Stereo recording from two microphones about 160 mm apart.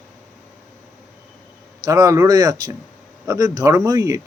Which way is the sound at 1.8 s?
20° right (ahead or behind).